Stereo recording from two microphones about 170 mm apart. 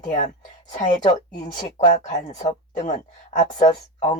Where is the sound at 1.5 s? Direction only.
50° left (ahead or behind).